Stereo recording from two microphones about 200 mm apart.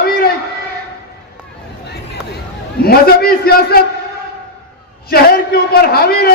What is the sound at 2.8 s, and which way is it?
A man's voice, 50° left (ahead or behind).